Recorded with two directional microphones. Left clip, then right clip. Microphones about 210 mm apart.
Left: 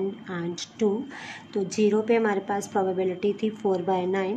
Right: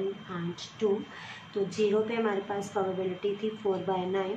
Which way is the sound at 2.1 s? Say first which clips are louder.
Left 7 dB; 65° left (ahead or behind).